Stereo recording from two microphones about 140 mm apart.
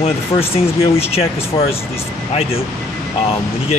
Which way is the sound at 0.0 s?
45° left (ahead or behind).